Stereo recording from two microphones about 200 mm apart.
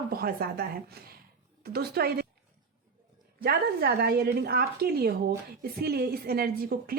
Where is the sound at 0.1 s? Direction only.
50° right (ahead or behind).